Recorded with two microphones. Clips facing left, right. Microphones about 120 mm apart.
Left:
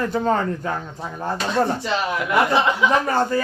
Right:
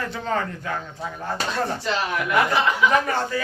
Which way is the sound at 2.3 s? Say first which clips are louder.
Left 3 dB; 25° left (ahead or behind).